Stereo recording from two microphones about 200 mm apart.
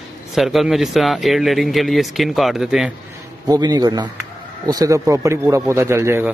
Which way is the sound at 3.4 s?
20° right (ahead or behind).